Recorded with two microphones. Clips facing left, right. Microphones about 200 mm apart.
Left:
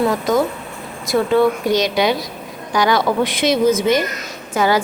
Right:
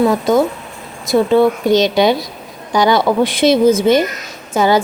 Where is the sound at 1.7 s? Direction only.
25° right (ahead or behind).